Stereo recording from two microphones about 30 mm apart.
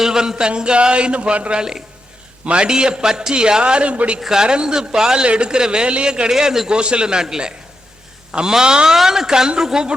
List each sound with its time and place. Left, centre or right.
0.0 s a man's voice: centre; by 1.5 s right
1.5 s a man's voice: right
4.3 s a man's voice: right
5.2 s a man's voice: right
6.3 s speech: centre
6.7 s a man's voice: right
9.0 s a man's voice: centre